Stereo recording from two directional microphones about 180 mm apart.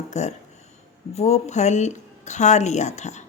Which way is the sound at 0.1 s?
40° left (ahead or behind).